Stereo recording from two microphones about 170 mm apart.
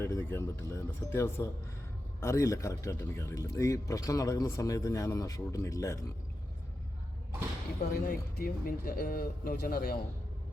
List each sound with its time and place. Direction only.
0.0 s speech: 15° left (ahead or behind)
7.8 s speech: 60° left (ahead or behind)